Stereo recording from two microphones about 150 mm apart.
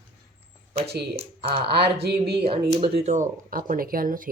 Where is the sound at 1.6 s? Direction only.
90° right.